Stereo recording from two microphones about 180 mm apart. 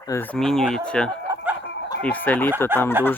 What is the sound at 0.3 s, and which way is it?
Speech, 5° left (ahead or behind).